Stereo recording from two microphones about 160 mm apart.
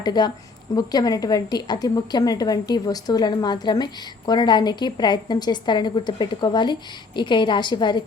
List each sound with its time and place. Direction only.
0.0 s a woman's voice: 25° left (ahead or behind)